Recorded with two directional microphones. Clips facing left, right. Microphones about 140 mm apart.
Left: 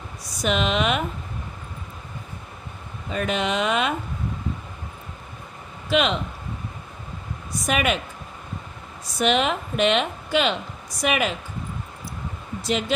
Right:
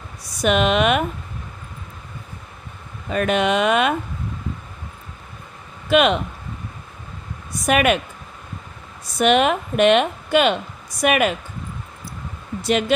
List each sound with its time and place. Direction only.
0.4 s a woman's voice: 60° right (ahead or behind)
3.1 s a woman's voice: 60° right (ahead or behind)
5.9 s speech: 55° right (ahead or behind)
7.6 s a woman's voice: 55° right (ahead or behind)
9.2 s a woman's voice: 55° right (ahead or behind)
12.6 s speech: 60° right (ahead or behind)